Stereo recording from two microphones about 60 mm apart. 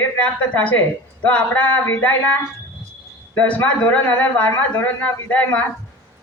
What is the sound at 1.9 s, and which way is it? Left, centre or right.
Speech, left.